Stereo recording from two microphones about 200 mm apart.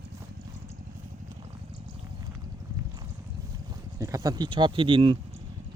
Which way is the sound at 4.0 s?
15° right (ahead or behind).